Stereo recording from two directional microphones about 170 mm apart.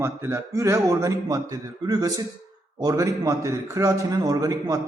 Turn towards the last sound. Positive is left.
turn(degrees=-20)  # may be behind; listen again after turning